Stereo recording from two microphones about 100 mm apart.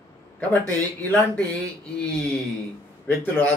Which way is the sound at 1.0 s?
15° left (ahead or behind).